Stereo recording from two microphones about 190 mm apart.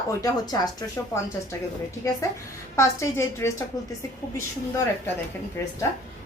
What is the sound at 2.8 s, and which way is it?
Speech, 15° left (ahead or behind).